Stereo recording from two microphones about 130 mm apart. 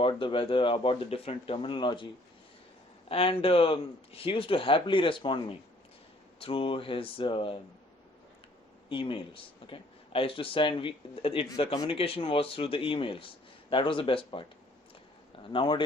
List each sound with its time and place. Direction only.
0.0 s speech: 40° left (ahead or behind)
3.1 s speech: 45° left (ahead or behind)
8.9 s speech: 40° left (ahead or behind)
15.5 s speech: 40° left (ahead or behind)